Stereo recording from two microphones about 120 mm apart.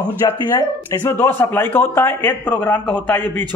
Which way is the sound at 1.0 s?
15° left (ahead or behind).